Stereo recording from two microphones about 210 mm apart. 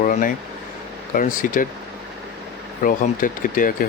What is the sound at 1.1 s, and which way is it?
Speech, 40° left (ahead or behind).